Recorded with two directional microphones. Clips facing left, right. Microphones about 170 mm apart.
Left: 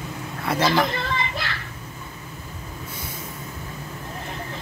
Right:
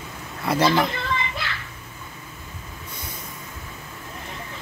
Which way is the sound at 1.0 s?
40° left (ahead or behind).